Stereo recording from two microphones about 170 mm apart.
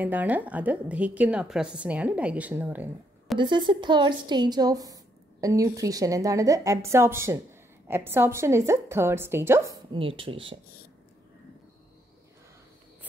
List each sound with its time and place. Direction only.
0.0 s a woman's voice: 10° right (ahead or behind)
3.3 s a woman's voice: 25° right (ahead or behind)
9.9 s speech: 30° right (ahead or behind)